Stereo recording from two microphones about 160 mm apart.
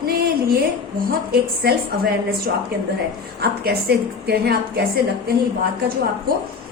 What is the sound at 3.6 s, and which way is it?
A woman's voice, 85° right.